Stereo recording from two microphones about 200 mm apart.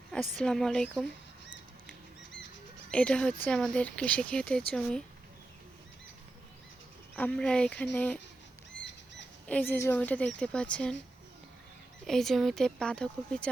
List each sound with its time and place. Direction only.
0.3 s speech: centre (ahead or behind)
2.9 s speech: 5° left (ahead or behind)
7.2 s a woman's voice: 5° left (ahead or behind)
9.5 s a woman's voice: 10° left (ahead or behind)
12.0 s speech: centre (ahead or behind)